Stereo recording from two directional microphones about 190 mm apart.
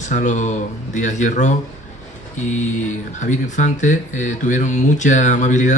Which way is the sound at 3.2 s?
40° left (ahead or behind).